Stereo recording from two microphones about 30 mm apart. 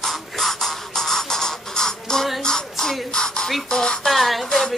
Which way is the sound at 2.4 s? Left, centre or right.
Centre.